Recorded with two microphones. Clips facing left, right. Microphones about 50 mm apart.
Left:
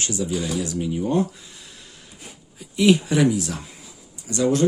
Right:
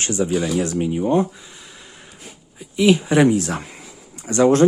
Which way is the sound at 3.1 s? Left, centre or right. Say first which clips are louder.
Right 4 dB; right.